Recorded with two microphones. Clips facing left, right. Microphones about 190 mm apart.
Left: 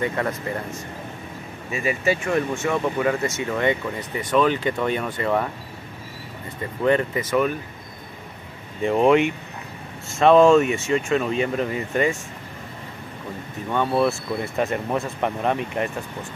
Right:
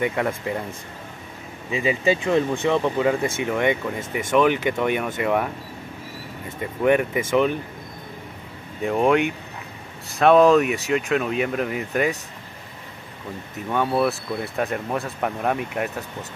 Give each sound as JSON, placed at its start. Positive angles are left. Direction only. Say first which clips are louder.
{"t": 0.0, "sound": "speech", "louder": "right 1 dB", "side_deg": -10}
{"t": 1.8, "sound": "speech", "louder": "right 2 dB", "side_deg": -20}
{"t": 6.8, "sound": "speech", "louder": "right 1 dB", "side_deg": -10}
{"t": 7.2, "sound": "speech", "louder": "right 2 dB", "side_deg": -25}
{"t": 8.8, "sound": "speech", "louder": "left 2 dB", "side_deg": 0}
{"t": 13.7, "sound": "speech", "louder": "left 1 dB", "side_deg": -5}